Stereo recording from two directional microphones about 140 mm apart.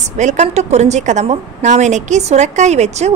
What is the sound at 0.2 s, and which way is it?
A woman's voice, 55° right (ahead or behind).